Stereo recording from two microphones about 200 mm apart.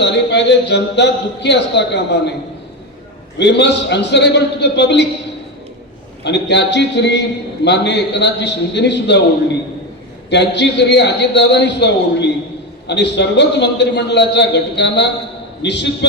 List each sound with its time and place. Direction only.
0.0 s a man's voice: 60° left (ahead or behind)
3.3 s a man's voice: 60° left (ahead or behind)
6.2 s a man's voice: 60° left (ahead or behind)